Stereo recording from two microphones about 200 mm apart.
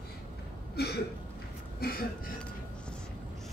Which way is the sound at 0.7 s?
55° left (ahead or behind).